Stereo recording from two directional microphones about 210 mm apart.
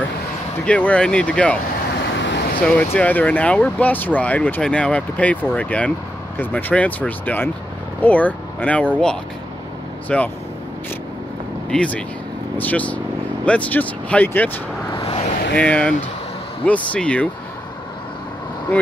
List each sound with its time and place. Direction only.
0.7 s speech: 5° left (ahead or behind)
2.1 s vehicle: 60° left (ahead or behind)
2.6 s speech: 5° left (ahead or behind)
10.0 s speech: 5° left (ahead or behind)
11.7 s speech: 5° left (ahead or behind)
15.0 s vehicle: 25° left (ahead or behind)
15.5 s speech: 5° left (ahead or behind)